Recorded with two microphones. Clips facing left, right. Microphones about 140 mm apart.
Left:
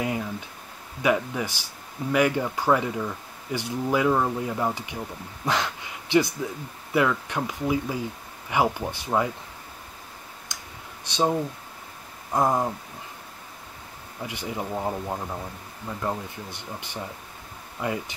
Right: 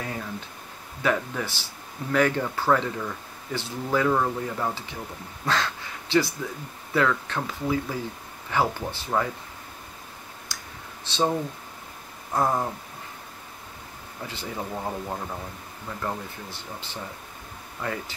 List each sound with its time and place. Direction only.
0.0 s a sound: 15° left (ahead or behind)
1.0 s speech: 10° left (ahead or behind)
10.5 s clicking: 20° left (ahead or behind)
11.1 s speech: 15° left (ahead or behind)
14.2 s speech: 15° left (ahead or behind)